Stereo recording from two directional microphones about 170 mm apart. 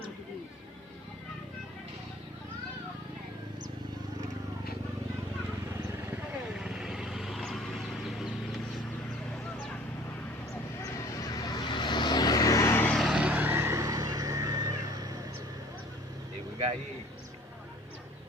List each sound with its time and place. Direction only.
6.6 s vehicle: 5° right (ahead or behind)
11.3 s vehicle: 20° left (ahead or behind)
13.0 s vehicle: 5° right (ahead or behind); by 15.2 s 20° right (ahead or behind)